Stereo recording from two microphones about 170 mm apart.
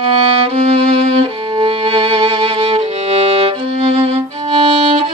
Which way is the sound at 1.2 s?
30° right (ahead or behind).